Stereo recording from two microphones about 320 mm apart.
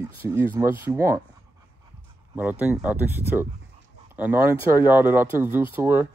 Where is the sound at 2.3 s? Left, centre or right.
Centre.